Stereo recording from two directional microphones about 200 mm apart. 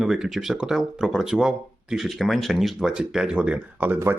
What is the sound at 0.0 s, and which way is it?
Speech, centre (ahead or behind).